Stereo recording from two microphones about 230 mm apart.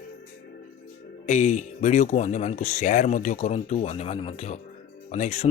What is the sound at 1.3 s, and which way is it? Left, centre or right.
Speech, left.